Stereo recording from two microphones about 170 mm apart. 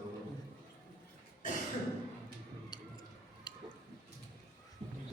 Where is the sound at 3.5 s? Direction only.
25° left (ahead or behind).